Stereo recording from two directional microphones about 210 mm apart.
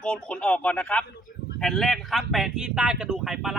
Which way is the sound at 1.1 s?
50° left (ahead or behind).